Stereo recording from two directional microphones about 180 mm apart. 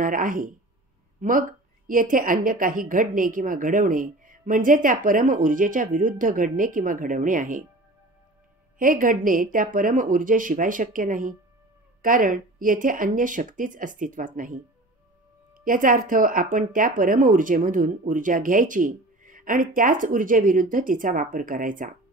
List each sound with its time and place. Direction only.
0.0 s speech: 50° right (ahead or behind)
8.7 s speech: 50° right (ahead or behind)
15.6 s speech: 50° right (ahead or behind)